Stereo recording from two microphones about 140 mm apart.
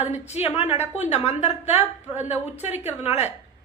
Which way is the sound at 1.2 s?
50° left (ahead or behind).